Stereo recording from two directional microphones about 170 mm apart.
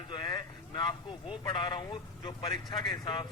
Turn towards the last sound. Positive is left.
turn(degrees=30)  # may be behind; listen again after turning